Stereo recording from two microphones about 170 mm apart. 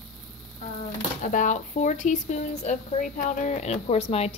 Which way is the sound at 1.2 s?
50° left (ahead or behind).